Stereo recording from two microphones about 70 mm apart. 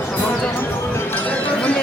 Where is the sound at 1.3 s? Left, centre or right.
Centre.